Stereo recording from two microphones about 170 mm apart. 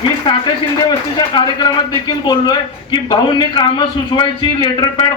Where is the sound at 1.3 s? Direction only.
25° left (ahead or behind).